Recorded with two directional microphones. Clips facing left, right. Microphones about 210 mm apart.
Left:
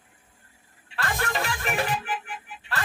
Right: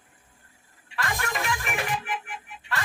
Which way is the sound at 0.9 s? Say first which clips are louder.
Left 2 dB; 35° left (ahead or behind).